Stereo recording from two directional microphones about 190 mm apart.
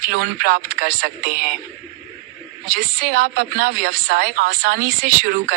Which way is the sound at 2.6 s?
45° right (ahead or behind).